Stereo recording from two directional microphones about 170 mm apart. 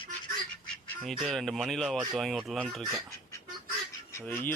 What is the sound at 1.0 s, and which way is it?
Speech, centre (ahead or behind).